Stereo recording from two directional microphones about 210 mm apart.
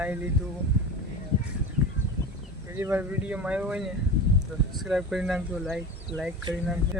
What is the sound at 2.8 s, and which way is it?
Speech, 10° right (ahead or behind).